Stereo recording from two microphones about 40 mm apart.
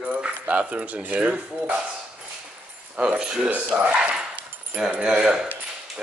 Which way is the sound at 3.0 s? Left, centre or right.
Right.